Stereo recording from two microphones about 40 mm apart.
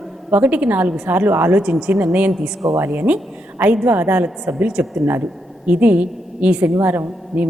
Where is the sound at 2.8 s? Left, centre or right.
Right.